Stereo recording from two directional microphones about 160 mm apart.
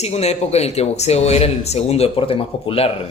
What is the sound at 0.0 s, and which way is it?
Speech, 40° left (ahead or behind).